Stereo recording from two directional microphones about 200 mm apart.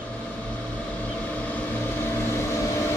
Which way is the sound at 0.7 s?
5° left (ahead or behind).